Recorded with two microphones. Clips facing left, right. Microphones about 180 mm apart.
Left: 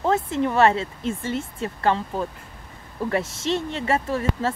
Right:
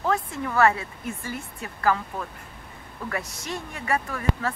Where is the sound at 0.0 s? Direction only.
25° left (ahead or behind).